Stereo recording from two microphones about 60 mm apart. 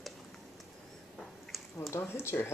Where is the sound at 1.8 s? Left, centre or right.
Left.